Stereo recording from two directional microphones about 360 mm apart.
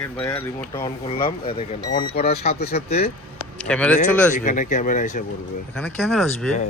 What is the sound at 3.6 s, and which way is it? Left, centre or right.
Speech, centre.